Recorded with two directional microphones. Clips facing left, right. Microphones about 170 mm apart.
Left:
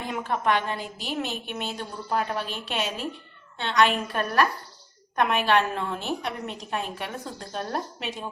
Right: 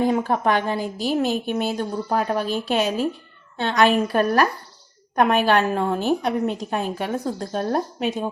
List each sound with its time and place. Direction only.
0.0 s a woman's voice: 40° right (ahead or behind)